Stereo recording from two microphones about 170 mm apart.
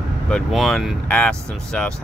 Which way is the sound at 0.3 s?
Centre (ahead or behind).